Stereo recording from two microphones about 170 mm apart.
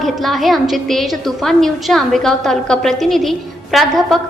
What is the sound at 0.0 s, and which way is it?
A woman's voice, centre (ahead or behind).